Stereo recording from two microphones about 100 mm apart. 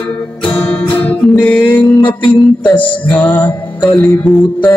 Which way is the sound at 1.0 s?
15° left (ahead or behind).